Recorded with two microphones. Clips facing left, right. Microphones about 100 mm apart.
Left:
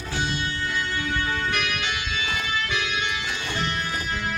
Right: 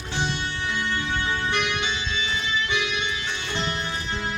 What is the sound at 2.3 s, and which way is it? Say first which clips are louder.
Music: even; 55° left (ahead or behind).